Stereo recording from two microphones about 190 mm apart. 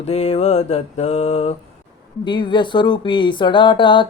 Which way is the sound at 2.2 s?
25° left (ahead or behind).